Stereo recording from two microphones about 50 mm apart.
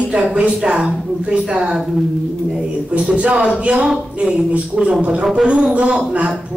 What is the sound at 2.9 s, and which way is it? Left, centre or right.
Speech, right.